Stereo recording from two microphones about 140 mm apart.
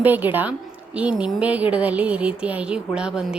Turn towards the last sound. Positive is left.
turn(degrees=-5)  # may be behind; listen again after turning